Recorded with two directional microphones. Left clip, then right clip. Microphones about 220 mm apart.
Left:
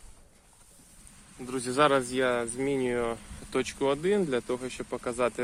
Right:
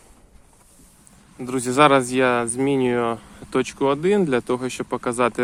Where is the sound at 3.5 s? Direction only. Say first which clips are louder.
Right 7 dB; 25° right (ahead or behind).